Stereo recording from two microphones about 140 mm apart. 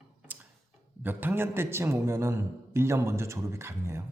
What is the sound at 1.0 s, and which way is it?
A man's voice, 15° right (ahead or behind).